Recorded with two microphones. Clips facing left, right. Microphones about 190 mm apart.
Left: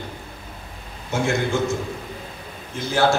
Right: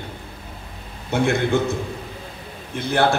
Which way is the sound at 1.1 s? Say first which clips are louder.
Right 3 dB; 60° right (ahead or behind).